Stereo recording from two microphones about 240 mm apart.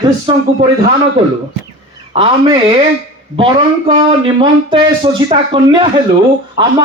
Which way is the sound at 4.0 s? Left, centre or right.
Right.